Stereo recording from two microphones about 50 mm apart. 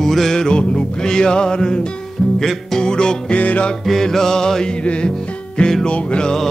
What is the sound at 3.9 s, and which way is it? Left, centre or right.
Music, centre.